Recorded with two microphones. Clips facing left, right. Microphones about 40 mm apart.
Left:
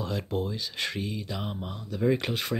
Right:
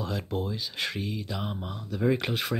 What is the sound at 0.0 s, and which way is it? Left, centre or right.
Speech, centre.